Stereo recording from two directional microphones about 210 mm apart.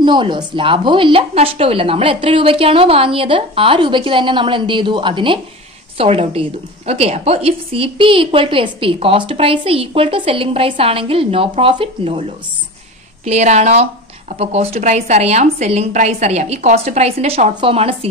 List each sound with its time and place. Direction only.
0.0 s a woman's voice: 20° right (ahead or behind)